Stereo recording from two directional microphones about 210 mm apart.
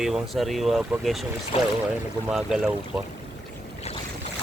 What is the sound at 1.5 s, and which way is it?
Speech, 30° left (ahead or behind).